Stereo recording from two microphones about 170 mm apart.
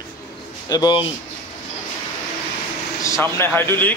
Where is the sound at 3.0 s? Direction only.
15° left (ahead or behind).